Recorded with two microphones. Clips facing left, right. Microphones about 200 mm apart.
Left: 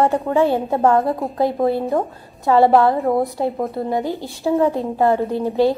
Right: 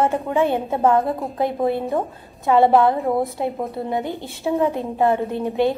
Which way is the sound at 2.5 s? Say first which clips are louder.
Left 1 dB; 20° right (ahead or behind).